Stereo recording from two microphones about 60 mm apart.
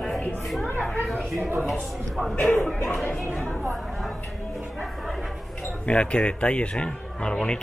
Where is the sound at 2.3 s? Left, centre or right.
Left.